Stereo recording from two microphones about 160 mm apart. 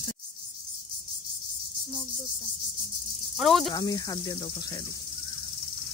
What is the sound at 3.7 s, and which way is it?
Snake, 25° left (ahead or behind).